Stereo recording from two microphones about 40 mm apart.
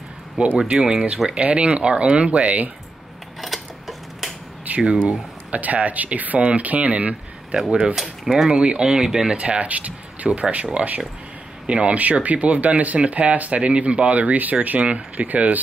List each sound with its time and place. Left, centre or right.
0.6 s speech: centre
1.3 s speech: right
3.3 s a sound: centre
4.9 s speech: right
7.9 s speech: centre
8.5 s speech: right
8.8 s speech: centre
9.4 s speech: right
14.8 s speech: right